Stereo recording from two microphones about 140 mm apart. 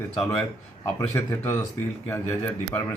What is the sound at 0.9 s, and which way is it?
Speech, 15° left (ahead or behind).